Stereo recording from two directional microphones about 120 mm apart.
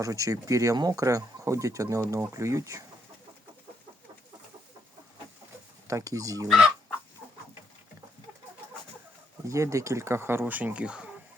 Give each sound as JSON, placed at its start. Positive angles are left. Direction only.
{"t": 0.0, "sound": "speech", "side_deg": -30}
{"t": 5.9, "sound": "speech", "side_deg": -30}
{"t": 9.5, "sound": "speech", "side_deg": -25}